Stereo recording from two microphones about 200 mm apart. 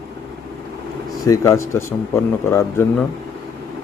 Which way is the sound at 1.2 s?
15° left (ahead or behind).